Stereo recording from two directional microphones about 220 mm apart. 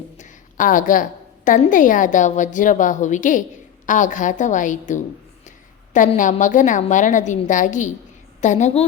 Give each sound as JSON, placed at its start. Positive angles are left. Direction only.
{"t": 0.2, "sound": "a woman's voice", "side_deg": 35}